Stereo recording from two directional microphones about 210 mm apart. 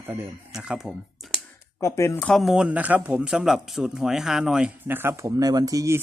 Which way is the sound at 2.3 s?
Centre (ahead or behind).